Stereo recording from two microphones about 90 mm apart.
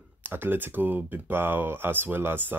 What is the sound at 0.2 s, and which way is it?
Speech, 25° right (ahead or behind).